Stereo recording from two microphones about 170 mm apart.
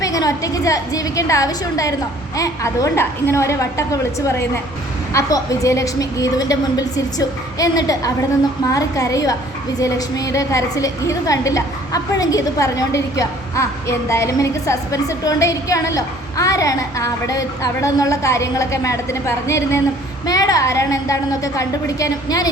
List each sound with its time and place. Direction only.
0.0 s a woman's voice: 20° left (ahead or behind)